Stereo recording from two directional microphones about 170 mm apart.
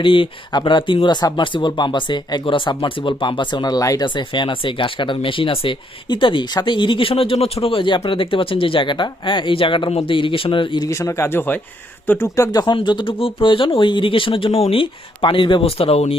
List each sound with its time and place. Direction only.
0.0 s speech: 30° left (ahead or behind)